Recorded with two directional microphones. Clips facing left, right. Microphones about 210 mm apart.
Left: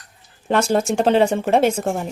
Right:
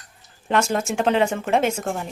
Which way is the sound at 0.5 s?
35° left (ahead or behind).